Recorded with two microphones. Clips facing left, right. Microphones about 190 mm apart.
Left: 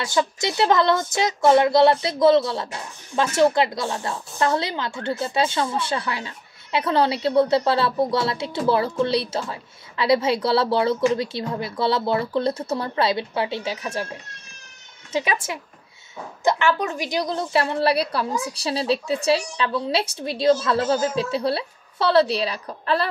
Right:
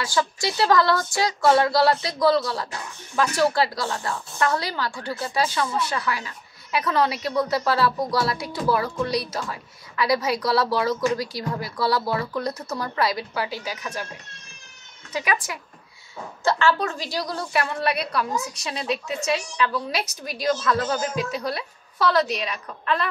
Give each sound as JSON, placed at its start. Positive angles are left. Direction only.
{"t": 0.0, "sound": "a woman's voice", "side_deg": 20}
{"t": 15.1, "sound": "a woman's voice", "side_deg": 25}